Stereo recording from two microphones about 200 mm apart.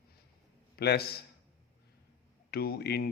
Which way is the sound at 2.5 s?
50° left (ahead or behind).